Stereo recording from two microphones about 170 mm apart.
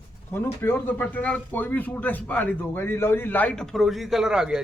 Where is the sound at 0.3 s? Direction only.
15° left (ahead or behind).